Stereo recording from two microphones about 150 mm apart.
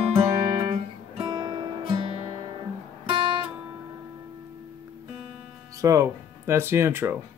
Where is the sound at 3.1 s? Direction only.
35° right (ahead or behind).